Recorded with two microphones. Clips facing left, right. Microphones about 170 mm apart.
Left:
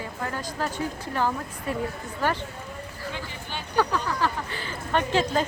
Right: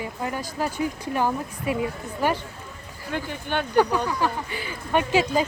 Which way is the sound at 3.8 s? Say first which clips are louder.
Right 3 dB; 15° right (ahead or behind).